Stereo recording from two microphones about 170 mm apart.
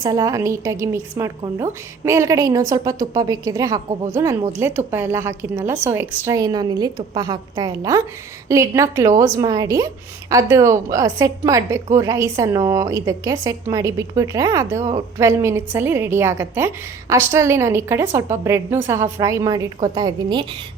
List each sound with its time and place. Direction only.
0.0 s a woman's voice: 20° right (ahead or behind)